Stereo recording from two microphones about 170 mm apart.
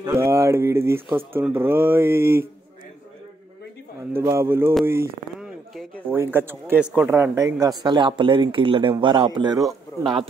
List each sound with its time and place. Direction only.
0.0 s speech: 15° right (ahead or behind)
4.1 s speech: 15° right (ahead or behind)
6.1 s speech: 10° right (ahead or behind)